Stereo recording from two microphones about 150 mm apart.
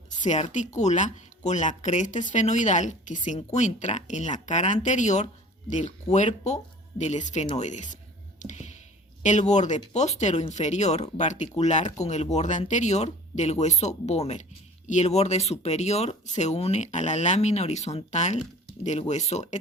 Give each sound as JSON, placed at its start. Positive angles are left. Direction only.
{"t": 0.1, "sound": "speech", "side_deg": 50}
{"t": 8.4, "sound": "a sound", "side_deg": 50}
{"t": 9.2, "sound": "speech", "side_deg": 50}